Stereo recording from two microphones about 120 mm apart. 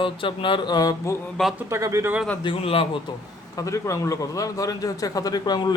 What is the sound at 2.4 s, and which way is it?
Speech, 50° left (ahead or behind).